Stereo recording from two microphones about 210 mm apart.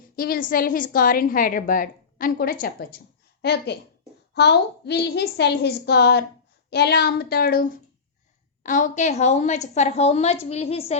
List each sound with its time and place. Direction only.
0.2 s a woman's voice: 45° left (ahead or behind)